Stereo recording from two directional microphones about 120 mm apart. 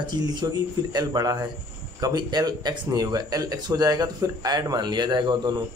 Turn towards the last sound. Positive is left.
turn(degrees=-35)  # may be behind; listen again after turning